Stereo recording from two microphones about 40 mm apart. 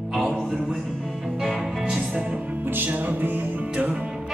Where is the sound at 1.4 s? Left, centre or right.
Centre.